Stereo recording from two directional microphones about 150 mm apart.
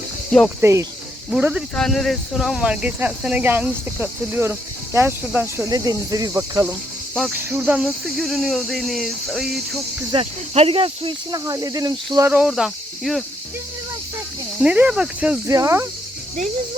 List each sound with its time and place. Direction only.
0.3 s speech: centre (ahead or behind)
0.6 s speech: 20° right (ahead or behind)
1.3 s speech: 10° right (ahead or behind)
1.7 s speech: 5° left (ahead or behind); by 5.6 s 10° right (ahead or behind)
5.6 s speech: 25° right (ahead or behind)
7.1 s cricket: centre (ahead or behind)
7.3 s cricket: 10° right (ahead or behind)
10.1 s speech: 40° right (ahead or behind); by 12.3 s 25° right (ahead or behind)
12.3 s cricket: 5° right (ahead or behind)
14.6 s speech: 10° right (ahead or behind)
15.4 s speech: 20° right (ahead or behind)